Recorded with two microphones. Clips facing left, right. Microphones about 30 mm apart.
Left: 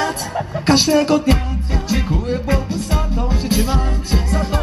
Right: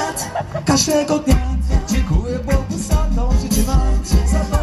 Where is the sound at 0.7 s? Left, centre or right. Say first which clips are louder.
Left 2 dB; left.